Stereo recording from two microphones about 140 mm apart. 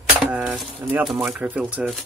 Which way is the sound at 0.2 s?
5° right (ahead or behind).